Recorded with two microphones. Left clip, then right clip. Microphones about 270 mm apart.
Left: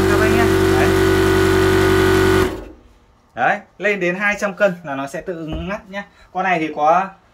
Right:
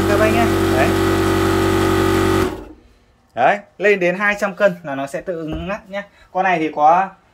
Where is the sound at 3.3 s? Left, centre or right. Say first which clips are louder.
Right 2 dB; centre.